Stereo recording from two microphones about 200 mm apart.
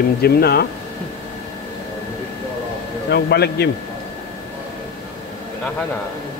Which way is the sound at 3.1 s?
55° left (ahead or behind).